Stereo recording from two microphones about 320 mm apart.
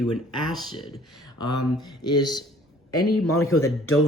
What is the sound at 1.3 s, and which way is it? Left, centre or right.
A man's voice, left.